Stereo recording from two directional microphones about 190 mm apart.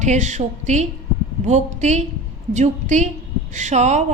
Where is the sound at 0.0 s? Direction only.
40° right (ahead or behind).